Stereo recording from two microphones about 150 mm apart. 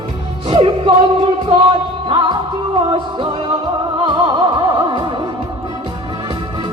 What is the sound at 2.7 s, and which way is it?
Music, 35° right (ahead or behind).